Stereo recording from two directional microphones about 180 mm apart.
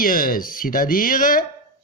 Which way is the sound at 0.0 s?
50° left (ahead or behind).